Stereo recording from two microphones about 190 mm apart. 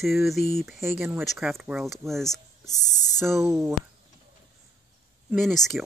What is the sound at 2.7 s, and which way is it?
Speech, 20° left (ahead or behind).